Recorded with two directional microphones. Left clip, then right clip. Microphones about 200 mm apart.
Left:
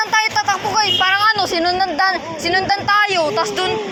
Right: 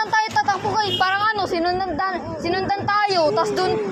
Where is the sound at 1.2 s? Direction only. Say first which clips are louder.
Left 5 dB; centre (ahead or behind).